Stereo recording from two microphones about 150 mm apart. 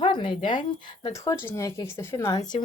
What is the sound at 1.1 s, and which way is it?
Speech, 20° left (ahead or behind).